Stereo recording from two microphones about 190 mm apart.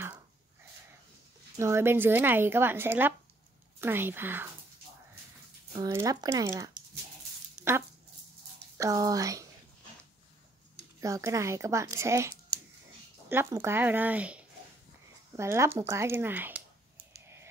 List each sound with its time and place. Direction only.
1.6 s speech: 15° right (ahead or behind)
5.8 s speech: 20° right (ahead or behind)
8.7 s speech: 20° right (ahead or behind)
11.0 s speech: 15° right (ahead or behind)